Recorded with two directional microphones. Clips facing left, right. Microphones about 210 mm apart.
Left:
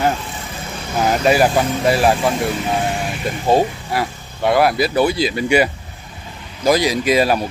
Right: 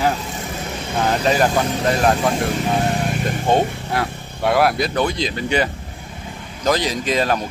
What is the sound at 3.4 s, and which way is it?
Speech, 5° left (ahead or behind).